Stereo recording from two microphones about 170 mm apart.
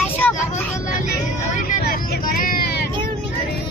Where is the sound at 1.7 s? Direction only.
55° left (ahead or behind).